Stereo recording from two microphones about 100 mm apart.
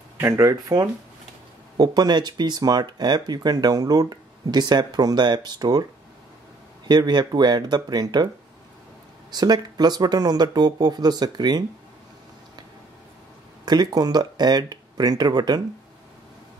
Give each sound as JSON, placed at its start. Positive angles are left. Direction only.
{"t": 0.2, "sound": "speech", "side_deg": -30}
{"t": 1.8, "sound": "speech", "side_deg": -45}
{"t": 6.9, "sound": "speech", "side_deg": -45}
{"t": 9.3, "sound": "speech", "side_deg": -45}
{"t": 13.7, "sound": "speech", "side_deg": -45}